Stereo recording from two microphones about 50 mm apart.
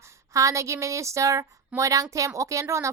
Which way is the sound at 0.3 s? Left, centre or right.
Right.